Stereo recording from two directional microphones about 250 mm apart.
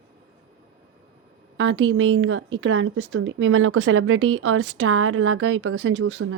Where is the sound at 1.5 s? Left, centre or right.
Right.